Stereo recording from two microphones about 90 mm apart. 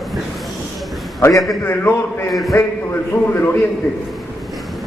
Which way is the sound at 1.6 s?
25° left (ahead or behind).